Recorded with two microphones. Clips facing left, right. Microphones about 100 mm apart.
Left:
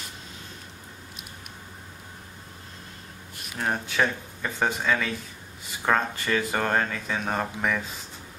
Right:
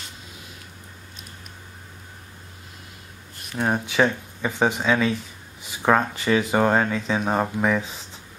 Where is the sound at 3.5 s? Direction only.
20° right (ahead or behind).